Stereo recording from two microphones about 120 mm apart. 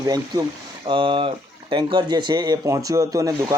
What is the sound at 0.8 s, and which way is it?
Speech, 45° right (ahead or behind).